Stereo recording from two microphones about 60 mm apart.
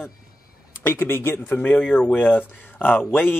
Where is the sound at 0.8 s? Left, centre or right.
Left.